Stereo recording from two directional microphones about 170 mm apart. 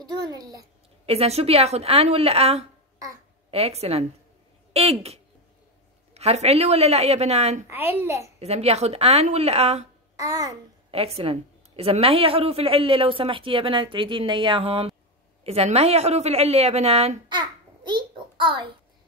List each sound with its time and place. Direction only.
0.0 s a child's voice: 25° right (ahead or behind)
1.0 s a woman's voice: 35° right (ahead or behind)
7.6 s a child's voice: 15° right (ahead or behind)
8.4 s a woman's voice: 40° right (ahead or behind)
10.1 s babbling: 20° right (ahead or behind)
10.9 s a woman's voice: 35° right (ahead or behind)
17.4 s a sound: 25° right (ahead or behind)